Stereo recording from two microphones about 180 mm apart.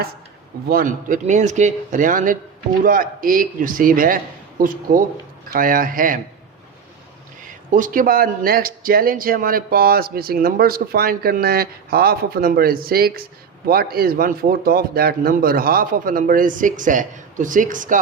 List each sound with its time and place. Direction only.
0.7 s a man's voice: 50° right (ahead or behind)
7.4 s a man's voice: 45° right (ahead or behind)